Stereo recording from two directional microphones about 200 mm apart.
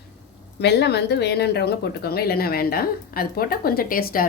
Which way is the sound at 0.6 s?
55° left (ahead or behind).